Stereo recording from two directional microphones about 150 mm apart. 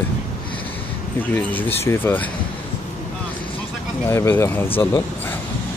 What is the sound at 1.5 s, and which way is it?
Speech, 15° left (ahead or behind).